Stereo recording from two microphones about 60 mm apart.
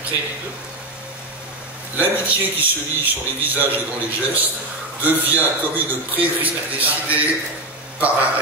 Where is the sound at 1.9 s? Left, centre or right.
Right.